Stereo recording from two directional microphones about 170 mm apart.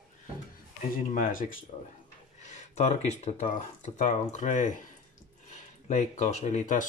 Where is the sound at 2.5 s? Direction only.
45° left (ahead or behind).